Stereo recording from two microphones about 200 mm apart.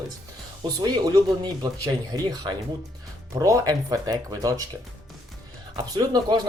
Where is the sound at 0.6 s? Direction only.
20° right (ahead or behind).